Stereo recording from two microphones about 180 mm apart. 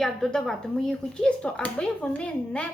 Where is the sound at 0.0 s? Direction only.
Centre (ahead or behind).